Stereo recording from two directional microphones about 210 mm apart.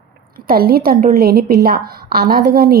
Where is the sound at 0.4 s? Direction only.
45° right (ahead or behind).